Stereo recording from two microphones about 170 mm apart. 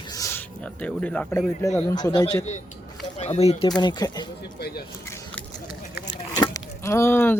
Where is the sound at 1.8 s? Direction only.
25° left (ahead or behind).